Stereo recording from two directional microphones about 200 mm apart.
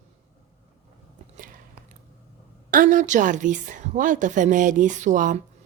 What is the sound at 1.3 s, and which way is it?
Biting, 40° right (ahead or behind).